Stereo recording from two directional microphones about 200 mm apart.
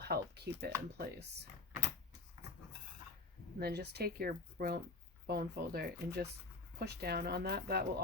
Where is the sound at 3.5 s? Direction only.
55° right (ahead or behind).